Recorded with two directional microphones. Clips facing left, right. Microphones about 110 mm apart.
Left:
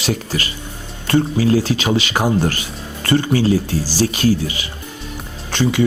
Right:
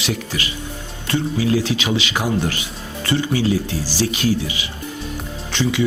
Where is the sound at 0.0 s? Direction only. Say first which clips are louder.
Left 3 dB; 40° left (ahead or behind).